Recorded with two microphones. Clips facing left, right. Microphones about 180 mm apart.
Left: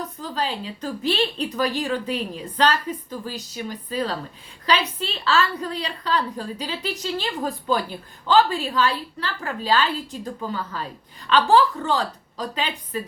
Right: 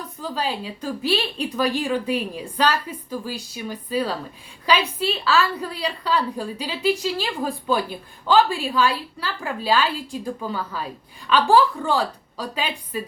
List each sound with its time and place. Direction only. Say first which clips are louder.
0.2 s a woman's voice: right 3 dB; 10° right (ahead or behind)